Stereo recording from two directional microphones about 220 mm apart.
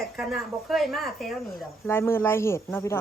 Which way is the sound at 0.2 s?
Centre (ahead or behind).